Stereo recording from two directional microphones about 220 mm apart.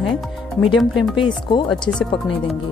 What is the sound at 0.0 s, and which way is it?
Music, centre (ahead or behind).